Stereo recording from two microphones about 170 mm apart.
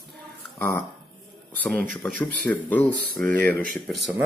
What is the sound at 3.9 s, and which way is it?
Speech, 5° right (ahead or behind).